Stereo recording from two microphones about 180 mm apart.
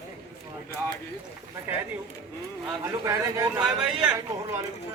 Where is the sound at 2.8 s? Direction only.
15° right (ahead or behind).